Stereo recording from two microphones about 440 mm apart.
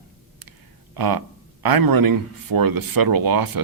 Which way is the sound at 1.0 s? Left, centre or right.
Right.